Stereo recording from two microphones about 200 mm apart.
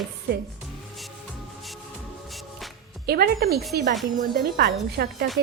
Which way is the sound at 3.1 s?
50° right (ahead or behind).